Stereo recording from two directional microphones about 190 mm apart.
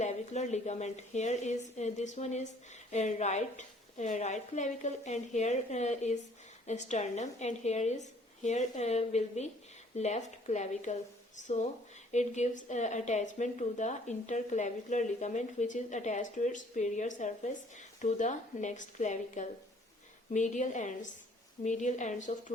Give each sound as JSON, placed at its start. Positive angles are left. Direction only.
{"t": 0.0, "sound": "a woman's voice", "side_deg": 35}